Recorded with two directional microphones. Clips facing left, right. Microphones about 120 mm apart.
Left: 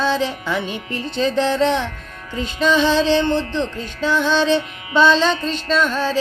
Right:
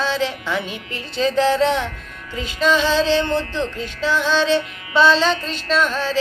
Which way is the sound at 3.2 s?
20° left (ahead or behind).